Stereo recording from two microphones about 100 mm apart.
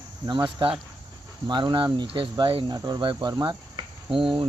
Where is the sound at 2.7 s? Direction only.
45° right (ahead or behind).